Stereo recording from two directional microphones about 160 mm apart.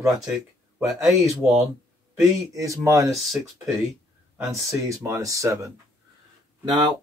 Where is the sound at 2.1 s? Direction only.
20° right (ahead or behind).